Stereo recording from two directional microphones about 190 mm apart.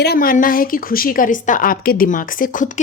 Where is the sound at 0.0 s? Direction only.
55° left (ahead or behind).